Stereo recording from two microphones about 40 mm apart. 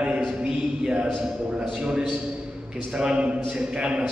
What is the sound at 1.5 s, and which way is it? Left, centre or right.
A man's voice, centre.